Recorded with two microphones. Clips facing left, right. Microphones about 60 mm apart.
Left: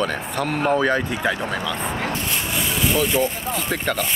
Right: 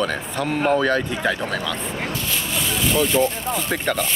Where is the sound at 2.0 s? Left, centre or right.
Left.